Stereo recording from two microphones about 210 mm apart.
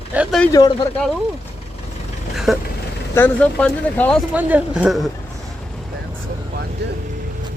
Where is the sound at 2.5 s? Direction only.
Centre (ahead or behind).